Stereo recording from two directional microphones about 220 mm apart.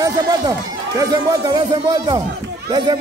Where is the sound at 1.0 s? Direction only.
15° right (ahead or behind).